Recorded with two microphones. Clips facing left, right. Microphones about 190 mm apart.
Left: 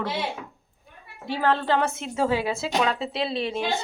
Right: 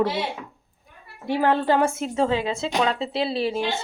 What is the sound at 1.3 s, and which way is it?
Speech, 15° right (ahead or behind).